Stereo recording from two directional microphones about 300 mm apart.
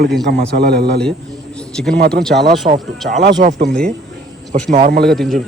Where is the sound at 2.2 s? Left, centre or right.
Centre.